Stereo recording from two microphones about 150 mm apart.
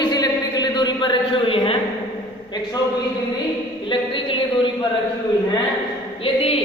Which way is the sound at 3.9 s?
35° left (ahead or behind).